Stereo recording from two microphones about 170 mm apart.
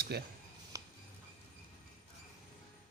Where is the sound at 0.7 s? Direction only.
20° right (ahead or behind).